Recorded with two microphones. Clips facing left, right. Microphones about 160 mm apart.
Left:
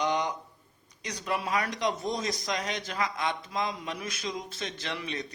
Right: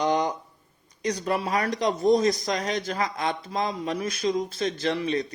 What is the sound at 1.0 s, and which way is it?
Speech, 40° right (ahead or behind).